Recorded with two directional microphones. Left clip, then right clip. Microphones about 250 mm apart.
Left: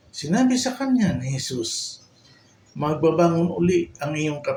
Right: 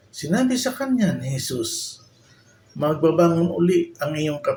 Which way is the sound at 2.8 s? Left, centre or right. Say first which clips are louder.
Right 1 dB; centre.